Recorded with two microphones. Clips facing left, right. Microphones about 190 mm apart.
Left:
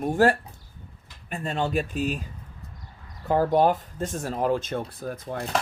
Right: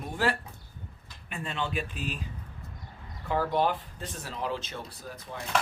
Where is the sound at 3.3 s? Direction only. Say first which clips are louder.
Left 7 dB; 45° left (ahead or behind).